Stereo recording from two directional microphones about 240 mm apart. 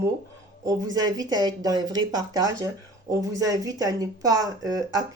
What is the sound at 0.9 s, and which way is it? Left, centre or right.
Speech, centre.